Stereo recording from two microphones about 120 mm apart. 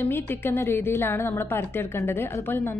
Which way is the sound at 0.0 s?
20° left (ahead or behind).